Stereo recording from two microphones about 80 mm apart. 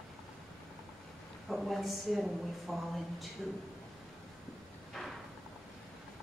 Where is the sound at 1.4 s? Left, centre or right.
Centre.